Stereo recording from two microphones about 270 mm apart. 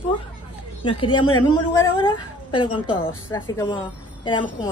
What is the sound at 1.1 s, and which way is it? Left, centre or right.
Speech, left.